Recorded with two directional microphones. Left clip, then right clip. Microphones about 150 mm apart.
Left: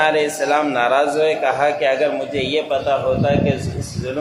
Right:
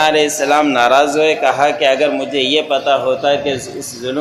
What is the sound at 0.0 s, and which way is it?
A man's voice, 25° right (ahead or behind).